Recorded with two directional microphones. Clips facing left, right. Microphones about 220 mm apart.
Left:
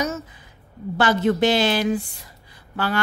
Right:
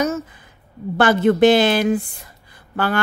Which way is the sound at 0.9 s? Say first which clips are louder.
Right 4 dB; 55° right (ahead or behind).